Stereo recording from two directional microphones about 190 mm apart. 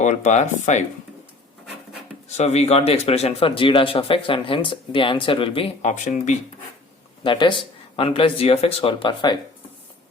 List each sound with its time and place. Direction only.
0.0 s speech: 40° left (ahead or behind)
2.3 s a man's voice: 35° left (ahead or behind)
7.3 s a man's voice: 25° left (ahead or behind)